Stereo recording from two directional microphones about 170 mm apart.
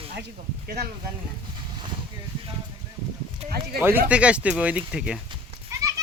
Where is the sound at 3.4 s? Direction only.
60° right (ahead or behind).